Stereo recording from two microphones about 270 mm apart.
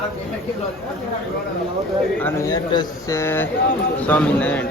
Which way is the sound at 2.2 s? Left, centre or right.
Centre.